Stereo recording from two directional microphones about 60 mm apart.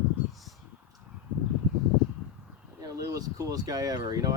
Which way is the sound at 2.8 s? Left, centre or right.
Right.